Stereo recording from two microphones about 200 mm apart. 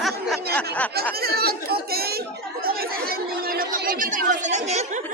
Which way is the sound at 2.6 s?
50° right (ahead or behind).